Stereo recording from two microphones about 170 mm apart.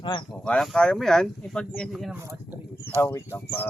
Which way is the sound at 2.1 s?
15° right (ahead or behind).